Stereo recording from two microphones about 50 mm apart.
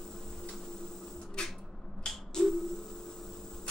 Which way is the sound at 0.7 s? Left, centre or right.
Centre.